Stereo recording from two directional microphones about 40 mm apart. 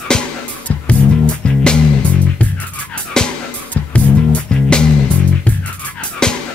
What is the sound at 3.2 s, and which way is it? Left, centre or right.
Music, centre.